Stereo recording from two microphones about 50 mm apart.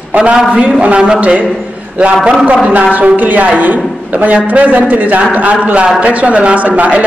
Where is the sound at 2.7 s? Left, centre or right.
Right.